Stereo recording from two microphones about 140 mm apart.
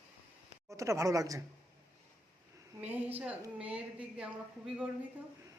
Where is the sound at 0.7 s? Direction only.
20° right (ahead or behind).